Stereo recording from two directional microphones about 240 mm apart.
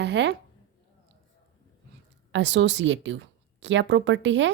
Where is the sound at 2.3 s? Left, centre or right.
Right.